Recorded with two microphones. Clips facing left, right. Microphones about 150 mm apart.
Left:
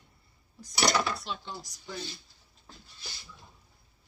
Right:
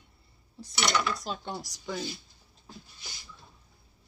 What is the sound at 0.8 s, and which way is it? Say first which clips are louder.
Speech: left 1 dB; 35° left (ahead or behind).